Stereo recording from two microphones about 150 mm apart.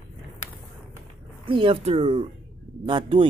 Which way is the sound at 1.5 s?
35° right (ahead or behind).